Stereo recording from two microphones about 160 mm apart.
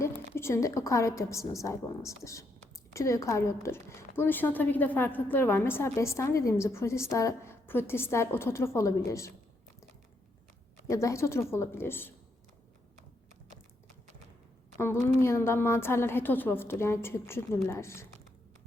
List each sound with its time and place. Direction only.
0.3 s a woman's voice: 15° left (ahead or behind)
10.8 s a woman's voice: 20° left (ahead or behind)
15.2 s a woman's voice: 15° left (ahead or behind)